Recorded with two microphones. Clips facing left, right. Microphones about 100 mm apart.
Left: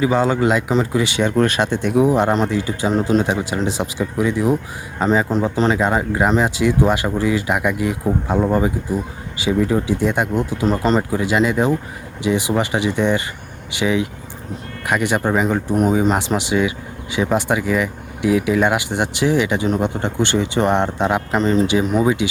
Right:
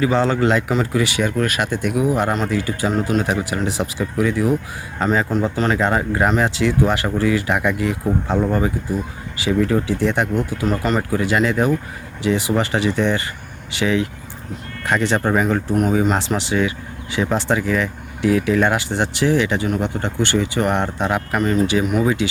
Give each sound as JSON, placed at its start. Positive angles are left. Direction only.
{"t": 0.0, "sound": "speech", "side_deg": 15}